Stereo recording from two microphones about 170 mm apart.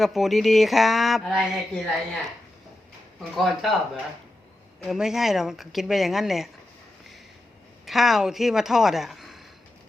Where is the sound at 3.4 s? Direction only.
Centre (ahead or behind).